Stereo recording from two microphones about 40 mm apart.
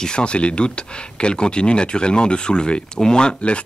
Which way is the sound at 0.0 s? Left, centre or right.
Left.